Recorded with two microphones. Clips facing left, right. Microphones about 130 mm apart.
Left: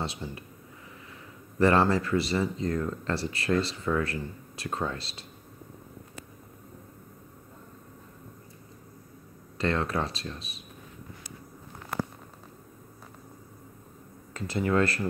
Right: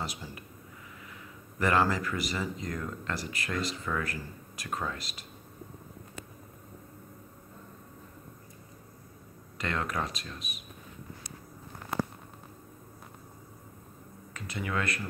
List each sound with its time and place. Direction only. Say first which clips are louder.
0.0 s speech: left 4 dB; 25° left (ahead or behind)
1.6 s speech: left 4 dB; 30° left (ahead or behind)
9.6 s speech: left 5 dB; 30° left (ahead or behind)
14.3 s speech: left 8 dB; 30° left (ahead or behind)